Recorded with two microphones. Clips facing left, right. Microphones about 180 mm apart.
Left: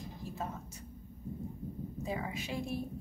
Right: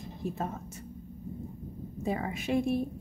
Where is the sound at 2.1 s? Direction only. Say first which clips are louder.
Right 9 dB; 55° right (ahead or behind).